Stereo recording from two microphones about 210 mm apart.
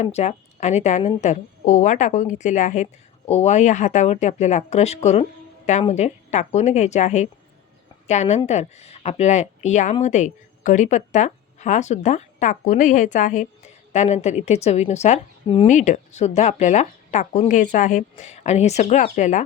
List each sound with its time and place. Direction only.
0.0 s a woman's voice: 30° left (ahead or behind)